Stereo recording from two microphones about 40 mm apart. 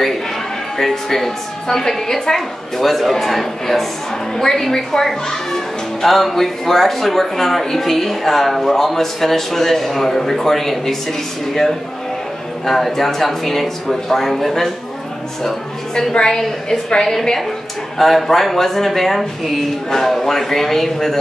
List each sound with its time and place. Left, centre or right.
0.7 s speech: centre
2.8 s speech: centre
16.2 s speech: centre